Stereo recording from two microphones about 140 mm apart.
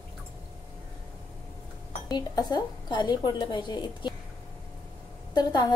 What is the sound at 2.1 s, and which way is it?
A woman's voice, 30° left (ahead or behind).